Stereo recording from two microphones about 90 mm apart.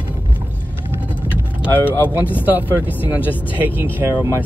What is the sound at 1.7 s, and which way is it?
Speech, 20° left (ahead or behind).